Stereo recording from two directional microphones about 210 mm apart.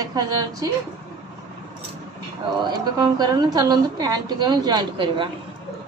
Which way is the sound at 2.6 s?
20° right (ahead or behind).